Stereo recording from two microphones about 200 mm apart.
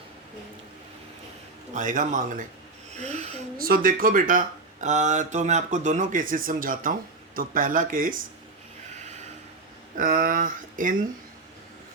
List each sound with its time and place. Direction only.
1.7 s speech: 40° right (ahead or behind)
3.6 s speech: 45° right (ahead or behind)
9.0 s a sound: 35° right (ahead or behind)
10.0 s speech: 45° right (ahead or behind)